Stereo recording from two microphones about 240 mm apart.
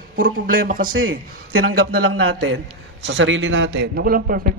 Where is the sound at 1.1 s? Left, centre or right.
Right.